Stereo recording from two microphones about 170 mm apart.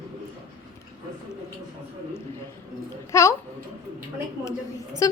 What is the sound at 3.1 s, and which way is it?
Speech, 15° left (ahead or behind).